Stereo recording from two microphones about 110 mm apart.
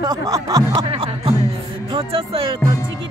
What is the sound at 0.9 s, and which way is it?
Speech, 55° right (ahead or behind).